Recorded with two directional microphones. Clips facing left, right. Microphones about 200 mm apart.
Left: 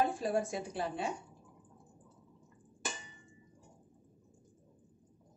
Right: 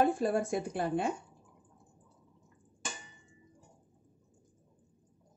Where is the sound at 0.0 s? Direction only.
55° right (ahead or behind).